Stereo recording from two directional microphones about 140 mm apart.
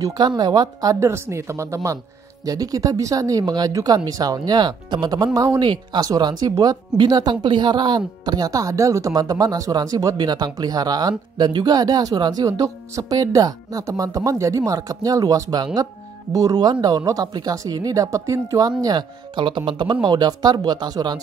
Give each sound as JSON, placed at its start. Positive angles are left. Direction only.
{"t": 0.4, "sound": "speech", "side_deg": -30}